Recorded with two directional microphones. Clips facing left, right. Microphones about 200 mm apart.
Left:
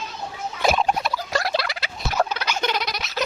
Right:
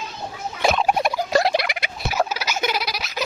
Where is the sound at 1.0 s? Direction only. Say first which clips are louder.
Right 6 dB; 20° right (ahead or behind); by 3.1 s centre (ahead or behind).